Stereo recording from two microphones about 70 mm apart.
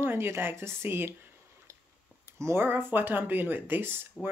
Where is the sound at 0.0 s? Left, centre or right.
Right.